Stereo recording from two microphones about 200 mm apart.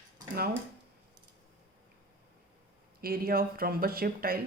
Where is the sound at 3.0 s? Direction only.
50° right (ahead or behind).